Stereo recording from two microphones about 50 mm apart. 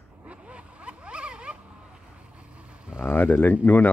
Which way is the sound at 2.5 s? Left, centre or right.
Right.